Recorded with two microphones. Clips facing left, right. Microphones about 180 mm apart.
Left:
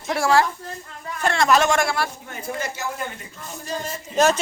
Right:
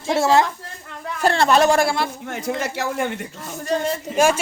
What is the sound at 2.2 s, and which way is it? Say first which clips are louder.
Speech: right 5 dB; 90° right.